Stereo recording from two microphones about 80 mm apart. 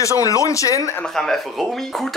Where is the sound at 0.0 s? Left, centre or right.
Left.